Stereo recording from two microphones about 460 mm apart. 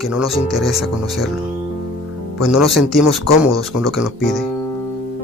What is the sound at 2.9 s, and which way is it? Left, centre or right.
Speech, left.